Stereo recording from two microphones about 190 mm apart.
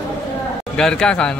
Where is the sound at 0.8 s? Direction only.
5° left (ahead or behind).